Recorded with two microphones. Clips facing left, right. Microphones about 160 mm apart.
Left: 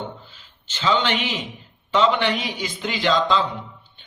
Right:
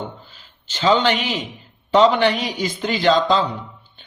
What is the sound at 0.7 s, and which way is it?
A man's voice, 40° right (ahead or behind).